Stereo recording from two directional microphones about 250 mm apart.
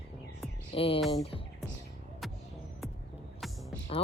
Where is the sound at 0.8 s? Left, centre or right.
Left.